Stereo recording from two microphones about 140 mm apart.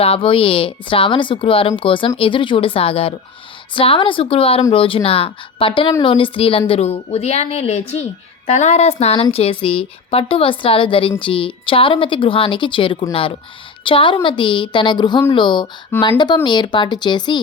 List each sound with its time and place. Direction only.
0.0 s a woman's voice: 40° left (ahead or behind)